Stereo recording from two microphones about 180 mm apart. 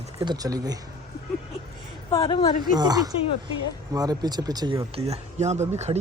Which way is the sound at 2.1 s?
20° left (ahead or behind).